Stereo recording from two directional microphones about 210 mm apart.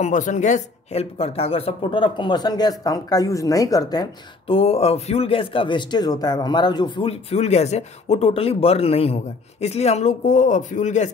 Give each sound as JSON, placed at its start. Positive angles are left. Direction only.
{"t": 0.0, "sound": "speech", "side_deg": 35}